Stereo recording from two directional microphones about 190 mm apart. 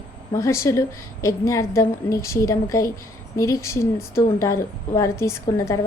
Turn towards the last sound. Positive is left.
turn(degrees=15)  # may be behind; listen again after turning